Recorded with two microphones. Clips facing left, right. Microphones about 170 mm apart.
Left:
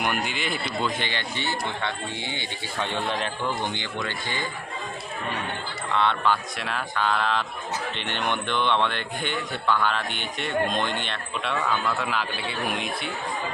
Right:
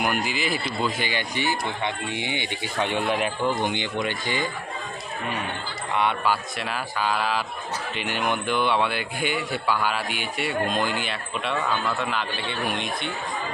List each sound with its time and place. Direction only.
0.0 s speech: 5° right (ahead or behind)
5.9 s speech: 10° right (ahead or behind)